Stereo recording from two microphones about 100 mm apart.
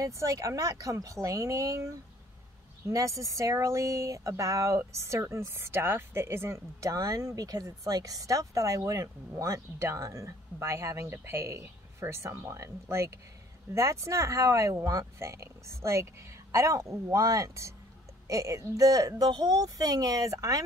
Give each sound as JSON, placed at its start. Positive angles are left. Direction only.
{"t": 0.0, "sound": "speech", "side_deg": -30}